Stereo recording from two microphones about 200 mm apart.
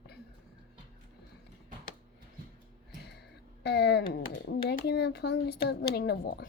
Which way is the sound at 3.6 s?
55° left (ahead or behind).